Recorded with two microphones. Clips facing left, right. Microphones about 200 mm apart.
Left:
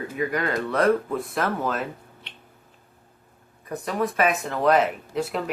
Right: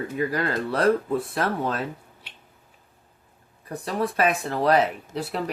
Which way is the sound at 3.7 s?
35° right (ahead or behind).